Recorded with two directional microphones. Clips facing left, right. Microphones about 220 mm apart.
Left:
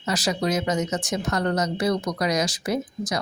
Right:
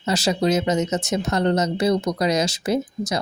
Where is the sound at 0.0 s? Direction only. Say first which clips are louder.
Right 4 dB; 25° right (ahead or behind).